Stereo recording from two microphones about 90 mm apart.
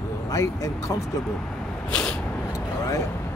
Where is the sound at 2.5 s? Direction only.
35° left (ahead or behind).